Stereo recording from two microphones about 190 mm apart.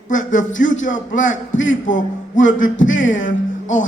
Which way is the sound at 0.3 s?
85° left.